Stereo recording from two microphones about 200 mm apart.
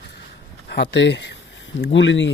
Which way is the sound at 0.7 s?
60° left (ahead or behind).